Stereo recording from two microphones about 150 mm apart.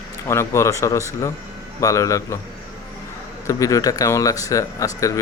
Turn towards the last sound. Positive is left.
turn(degrees=20)  # may be behind; listen again after turning